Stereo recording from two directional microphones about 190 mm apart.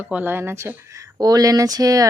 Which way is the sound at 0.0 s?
10° right (ahead or behind).